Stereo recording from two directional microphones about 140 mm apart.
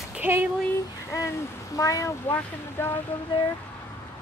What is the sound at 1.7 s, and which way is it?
Speech, 25° left (ahead or behind).